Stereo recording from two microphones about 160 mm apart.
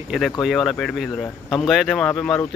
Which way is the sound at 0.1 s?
Centre (ahead or behind).